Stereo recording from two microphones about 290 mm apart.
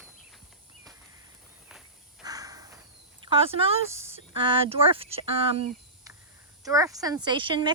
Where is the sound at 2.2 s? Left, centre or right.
Centre.